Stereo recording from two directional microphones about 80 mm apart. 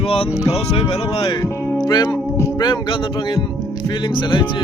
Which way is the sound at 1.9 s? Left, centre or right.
Left.